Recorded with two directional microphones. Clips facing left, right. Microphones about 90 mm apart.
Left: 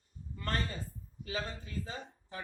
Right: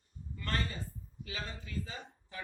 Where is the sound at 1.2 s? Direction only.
35° left (ahead or behind).